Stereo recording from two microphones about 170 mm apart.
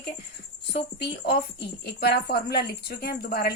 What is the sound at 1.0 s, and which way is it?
A woman's voice, 70° left (ahead or behind).